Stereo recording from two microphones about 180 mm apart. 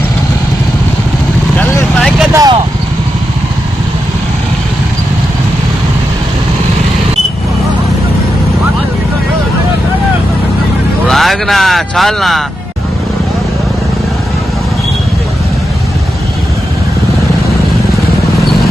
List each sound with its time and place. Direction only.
1.5 s vehicle: 10° left (ahead or behind)
2.3 s speech: 20° right (ahead or behind)
11.1 s speech: centre (ahead or behind)